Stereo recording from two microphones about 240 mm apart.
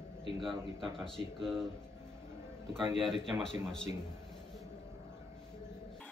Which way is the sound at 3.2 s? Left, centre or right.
Centre.